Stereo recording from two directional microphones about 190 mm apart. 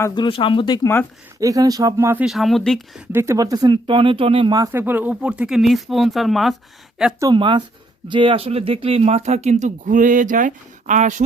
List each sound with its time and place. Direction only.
0.0 s speech: 25° left (ahead or behind)
1.4 s speech: 20° right (ahead or behind)
2.2 s speech: centre (ahead or behind)
3.1 s speech: 15° right (ahead or behind)
7.2 s speech: 20° right (ahead or behind); by 11.2 s 40° right (ahead or behind)